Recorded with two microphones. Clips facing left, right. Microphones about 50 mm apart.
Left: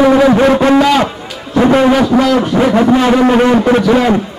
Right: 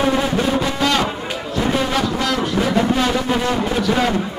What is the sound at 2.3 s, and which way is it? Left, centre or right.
A man's voice, left.